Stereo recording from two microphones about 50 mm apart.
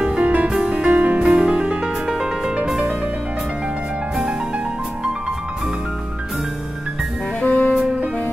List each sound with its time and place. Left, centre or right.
0.0 s music: centre
2.1 s music: centre
7.4 s saxophone: left